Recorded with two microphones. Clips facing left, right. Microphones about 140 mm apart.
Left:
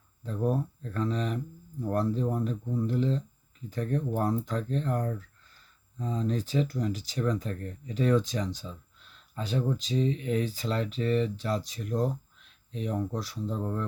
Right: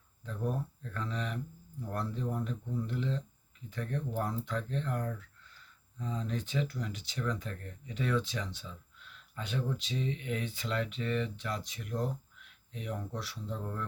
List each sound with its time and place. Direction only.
0.3 s speech: 35° left (ahead or behind)